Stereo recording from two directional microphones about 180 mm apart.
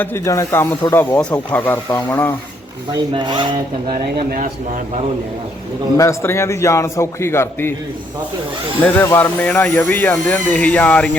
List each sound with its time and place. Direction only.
0.0 s speech: 15° left (ahead or behind)
3.1 s speech: 25° right (ahead or behind)
6.0 s speech: 15° left (ahead or behind)
8.8 s speech: 10° left (ahead or behind)